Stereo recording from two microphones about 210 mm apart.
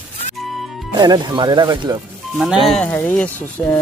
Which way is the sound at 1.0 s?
20° right (ahead or behind).